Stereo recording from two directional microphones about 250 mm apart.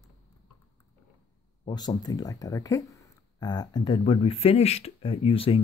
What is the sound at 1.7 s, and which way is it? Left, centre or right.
Speech, centre.